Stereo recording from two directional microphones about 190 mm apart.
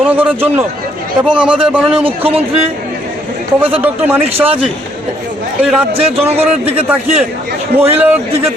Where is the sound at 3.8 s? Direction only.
10° right (ahead or behind).